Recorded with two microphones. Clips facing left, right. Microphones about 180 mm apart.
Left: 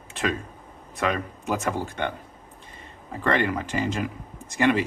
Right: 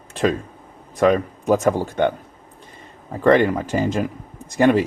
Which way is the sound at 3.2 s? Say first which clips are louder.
Right 9 dB; 45° right (ahead or behind).